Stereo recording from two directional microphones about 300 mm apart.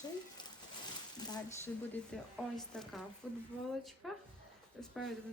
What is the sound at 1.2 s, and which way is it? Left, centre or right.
Speech, centre.